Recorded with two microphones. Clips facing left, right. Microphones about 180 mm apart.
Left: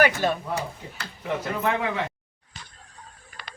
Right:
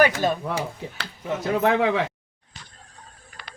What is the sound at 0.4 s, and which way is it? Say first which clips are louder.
Speech: right 2 dB; 90° right.